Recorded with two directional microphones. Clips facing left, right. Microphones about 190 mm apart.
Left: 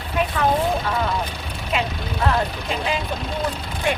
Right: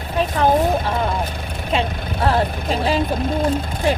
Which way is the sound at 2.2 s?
35° right (ahead or behind).